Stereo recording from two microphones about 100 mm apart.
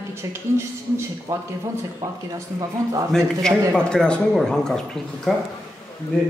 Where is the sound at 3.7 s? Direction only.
5° left (ahead or behind).